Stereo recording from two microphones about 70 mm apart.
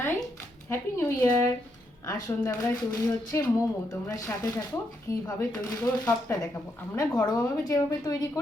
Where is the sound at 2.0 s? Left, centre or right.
Left.